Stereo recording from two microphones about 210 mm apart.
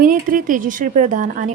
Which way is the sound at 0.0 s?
40° right (ahead or behind).